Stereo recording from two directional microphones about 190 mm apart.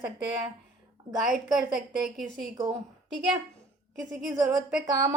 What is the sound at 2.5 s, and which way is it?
Speech, 20° right (ahead or behind).